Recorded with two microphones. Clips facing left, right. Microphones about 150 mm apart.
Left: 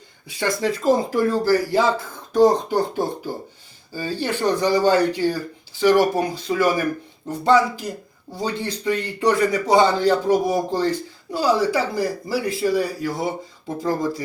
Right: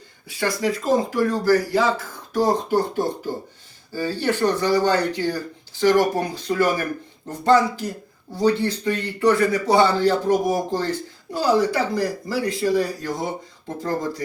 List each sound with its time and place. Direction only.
0.3 s speech: 20° left (ahead or behind)